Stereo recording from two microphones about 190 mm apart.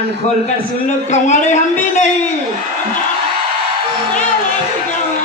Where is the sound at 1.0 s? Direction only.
40° left (ahead or behind).